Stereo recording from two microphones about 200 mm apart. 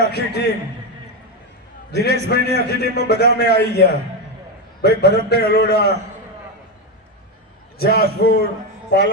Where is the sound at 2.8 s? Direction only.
55° left (ahead or behind).